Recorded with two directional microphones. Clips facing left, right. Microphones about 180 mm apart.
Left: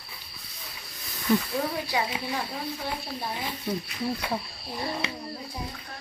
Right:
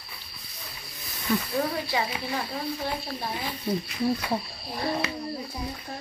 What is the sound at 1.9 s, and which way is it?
Speech, 10° left (ahead or behind).